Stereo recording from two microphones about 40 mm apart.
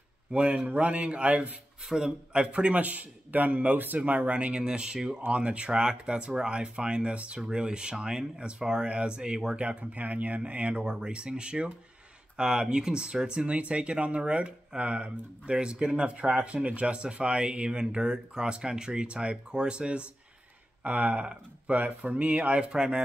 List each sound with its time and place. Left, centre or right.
0.3 s speech: right
1.9 s a man's voice: centre
2.3 s speech: right
2.7 s speech: right
4.6 s speech: right
9.6 s speech: right
13.5 s speech: right
20.8 s speech: right